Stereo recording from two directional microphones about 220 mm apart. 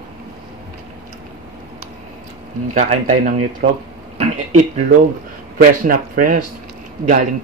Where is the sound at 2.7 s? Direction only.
35° right (ahead or behind).